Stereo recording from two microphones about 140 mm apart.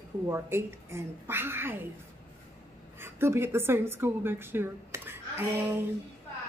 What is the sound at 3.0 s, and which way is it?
A woman's voice, 15° right (ahead or behind).